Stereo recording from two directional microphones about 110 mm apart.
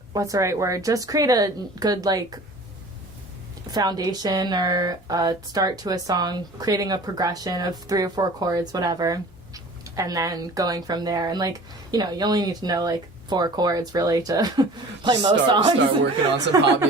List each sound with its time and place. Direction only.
0.1 s speech: 30° right (ahead or behind)
3.7 s speech: 35° right (ahead or behind)
16.5 s speech: 35° right (ahead or behind)